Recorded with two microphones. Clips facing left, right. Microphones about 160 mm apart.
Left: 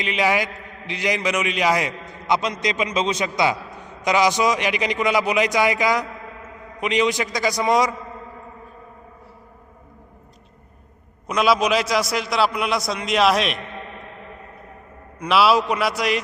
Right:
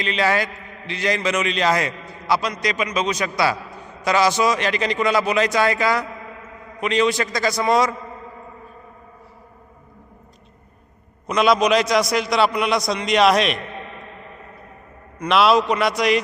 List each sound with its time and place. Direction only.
0.0 s a man's voice: 15° left (ahead or behind)
11.3 s a man's voice: 5° left (ahead or behind)
15.2 s a man's voice: 5° left (ahead or behind)